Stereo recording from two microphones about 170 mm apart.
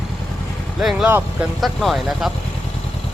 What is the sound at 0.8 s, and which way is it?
Speech, centre (ahead or behind).